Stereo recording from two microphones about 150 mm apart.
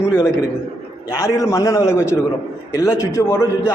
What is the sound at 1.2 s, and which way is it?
A man's voice, 20° left (ahead or behind).